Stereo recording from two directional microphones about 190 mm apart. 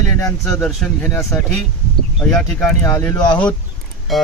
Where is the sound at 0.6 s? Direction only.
Centre (ahead or behind).